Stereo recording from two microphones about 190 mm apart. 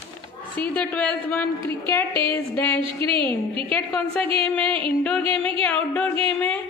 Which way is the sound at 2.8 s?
25° right (ahead or behind).